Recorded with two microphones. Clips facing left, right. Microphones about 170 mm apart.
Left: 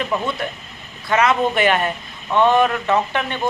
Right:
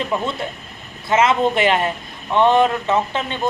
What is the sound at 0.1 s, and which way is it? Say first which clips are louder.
A man's voice: even; 25° right (ahead or behind).